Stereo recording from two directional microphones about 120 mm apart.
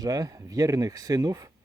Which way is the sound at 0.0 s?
30° right (ahead or behind).